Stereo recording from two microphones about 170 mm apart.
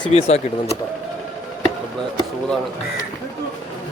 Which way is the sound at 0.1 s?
40° left (ahead or behind).